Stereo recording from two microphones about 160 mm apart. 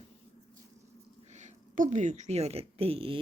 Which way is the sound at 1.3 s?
45° right (ahead or behind).